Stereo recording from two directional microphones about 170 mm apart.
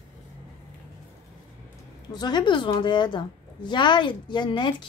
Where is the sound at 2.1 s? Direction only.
25° left (ahead or behind).